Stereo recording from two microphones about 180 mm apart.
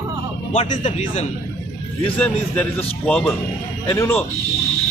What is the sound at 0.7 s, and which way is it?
Speech, 40° left (ahead or behind).